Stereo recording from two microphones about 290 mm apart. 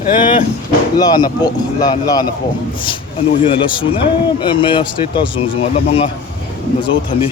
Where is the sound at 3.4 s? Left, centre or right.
Centre.